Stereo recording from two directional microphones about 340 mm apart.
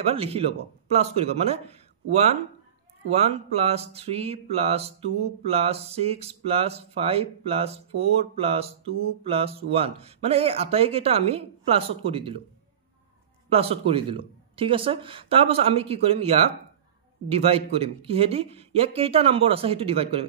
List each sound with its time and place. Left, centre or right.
0.0 s speech: centre
13.5 s speech: centre